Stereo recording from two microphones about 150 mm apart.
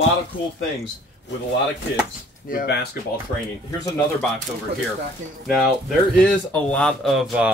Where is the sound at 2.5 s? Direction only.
70° left (ahead or behind).